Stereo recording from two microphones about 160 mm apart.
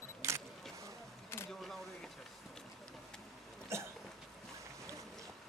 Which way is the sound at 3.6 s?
15° right (ahead or behind).